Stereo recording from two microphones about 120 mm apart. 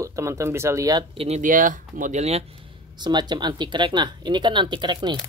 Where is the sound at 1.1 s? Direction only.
65° right (ahead or behind).